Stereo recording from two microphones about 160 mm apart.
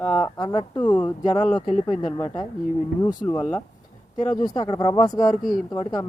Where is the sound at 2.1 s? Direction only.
25° left (ahead or behind).